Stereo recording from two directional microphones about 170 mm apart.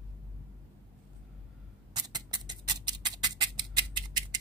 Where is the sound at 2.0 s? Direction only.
25° right (ahead or behind).